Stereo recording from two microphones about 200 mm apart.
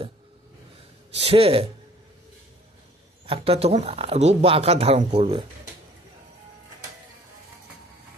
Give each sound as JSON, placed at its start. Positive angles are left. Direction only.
{"t": 1.1, "sound": "speech", "side_deg": -30}
{"t": 3.3, "sound": "speech", "side_deg": -30}